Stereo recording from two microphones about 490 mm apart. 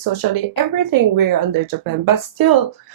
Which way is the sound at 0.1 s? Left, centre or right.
Right.